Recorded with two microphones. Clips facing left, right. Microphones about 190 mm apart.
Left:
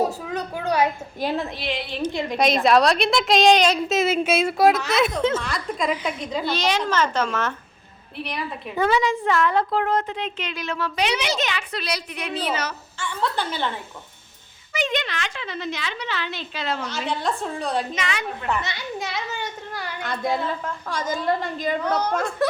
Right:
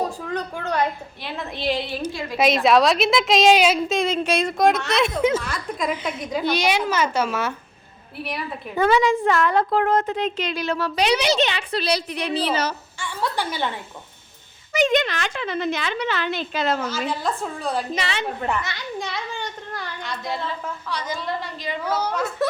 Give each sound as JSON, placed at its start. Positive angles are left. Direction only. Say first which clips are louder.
{"t": 0.2, "sound": "a woman's voice", "louder": "even", "side_deg": 5}
{"t": 1.2, "sound": "a woman's voice", "louder": "left 8 dB", "side_deg": 40}
{"t": 2.3, "sound": "a woman's voice", "louder": "right 1 dB", "side_deg": 0}
{"t": 3.9, "sound": "a woman's voice", "louder": "left 1 dB", "side_deg": 5}
{"t": 6.3, "sound": "a child's voice", "louder": "right 3 dB", "side_deg": -15}
{"t": 8.8, "sound": "a woman's voice", "louder": "right 3 dB", "side_deg": -50}
{"t": 13.0, "sound": "a child's voice", "louder": "left 1 dB", "side_deg": -10}
{"t": 14.7, "sound": "a woman's voice", "louder": "right 6 dB", "side_deg": -45}
{"t": 16.9, "sound": "a woman's voice", "louder": "even", "side_deg": 0}
{"t": 17.9, "sound": "a woman's voice", "louder": "right 2 dB", "side_deg": -30}
{"t": 18.8, "sound": "a woman's voice", "louder": "even", "side_deg": 0}
{"t": 20.0, "sound": "a woman's voice", "louder": "left 5 dB", "side_deg": 50}
{"t": 21.8, "sound": "a child's voice", "louder": "right 2 dB", "side_deg": -5}